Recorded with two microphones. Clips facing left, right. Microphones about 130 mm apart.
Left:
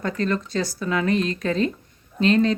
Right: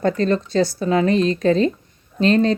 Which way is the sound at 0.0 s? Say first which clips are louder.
Right 6 dB; 30° right (ahead or behind).